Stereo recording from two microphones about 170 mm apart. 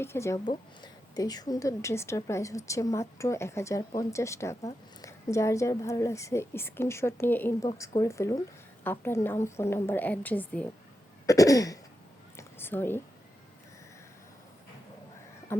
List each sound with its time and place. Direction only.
0.0 s a woman's voice: 15° left (ahead or behind)
11.3 s cough: 20° left (ahead or behind)
12.4 s a sound: 10° left (ahead or behind)